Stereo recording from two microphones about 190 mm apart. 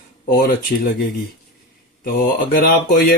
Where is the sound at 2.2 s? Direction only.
55° left (ahead or behind).